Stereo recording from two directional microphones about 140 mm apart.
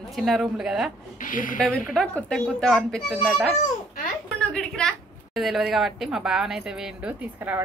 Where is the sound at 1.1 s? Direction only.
75° left (ahead or behind).